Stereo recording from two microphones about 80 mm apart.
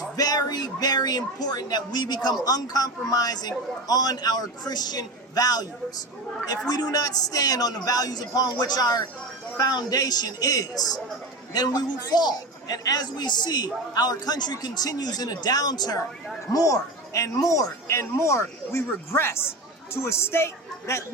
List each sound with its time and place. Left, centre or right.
0.2 s a man's voice: left
16.5 s speech: left